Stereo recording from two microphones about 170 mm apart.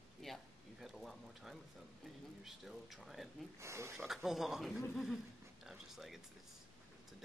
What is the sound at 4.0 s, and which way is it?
Speech, centre (ahead or behind).